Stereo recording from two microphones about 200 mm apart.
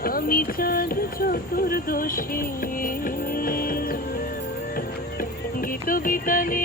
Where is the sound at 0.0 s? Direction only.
45° left (ahead or behind).